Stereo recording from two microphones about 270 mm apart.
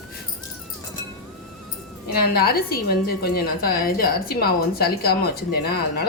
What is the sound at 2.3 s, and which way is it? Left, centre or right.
A woman's voice, left.